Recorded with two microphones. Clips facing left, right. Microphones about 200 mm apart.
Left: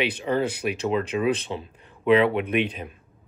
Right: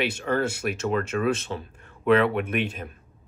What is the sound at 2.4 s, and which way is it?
Speech, 45° right (ahead or behind).